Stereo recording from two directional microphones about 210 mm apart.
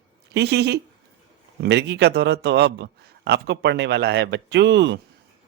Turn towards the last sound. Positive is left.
turn(degrees=-55)  # may be behind; listen again after turning